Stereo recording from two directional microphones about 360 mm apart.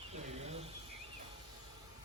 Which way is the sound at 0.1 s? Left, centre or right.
Centre.